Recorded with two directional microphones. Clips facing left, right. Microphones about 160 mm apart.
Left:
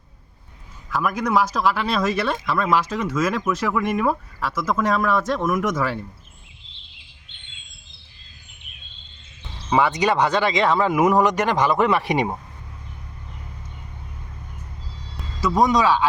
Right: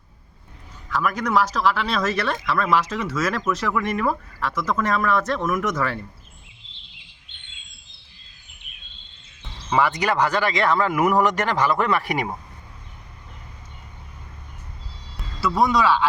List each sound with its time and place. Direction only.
0.9 s speech: 5° left (ahead or behind)
9.6 s speech: 20° left (ahead or behind)
15.4 s speech: 20° left (ahead or behind)